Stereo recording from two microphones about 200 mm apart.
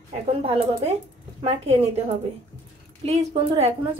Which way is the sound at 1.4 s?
30° right (ahead or behind).